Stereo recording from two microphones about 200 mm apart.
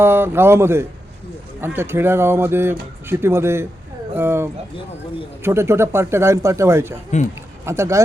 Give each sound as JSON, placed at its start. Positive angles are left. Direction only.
{"t": 0.0, "sound": "speech", "side_deg": -10}
{"t": 7.1, "sound": "speech", "side_deg": 35}
{"t": 7.6, "sound": "speech", "side_deg": -15}